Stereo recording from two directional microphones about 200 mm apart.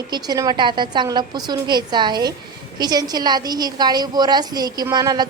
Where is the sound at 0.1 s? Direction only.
20° right (ahead or behind).